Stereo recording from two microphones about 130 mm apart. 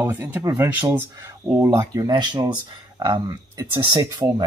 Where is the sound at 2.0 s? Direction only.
35° right (ahead or behind).